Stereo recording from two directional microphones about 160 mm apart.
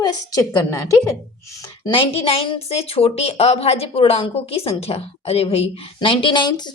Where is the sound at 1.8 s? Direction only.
30° left (ahead or behind).